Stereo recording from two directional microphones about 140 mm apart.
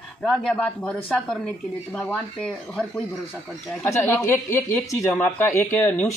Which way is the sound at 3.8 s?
15° left (ahead or behind).